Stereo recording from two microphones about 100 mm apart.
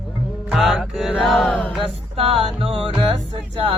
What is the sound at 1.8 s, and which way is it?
Music, 70° right (ahead or behind).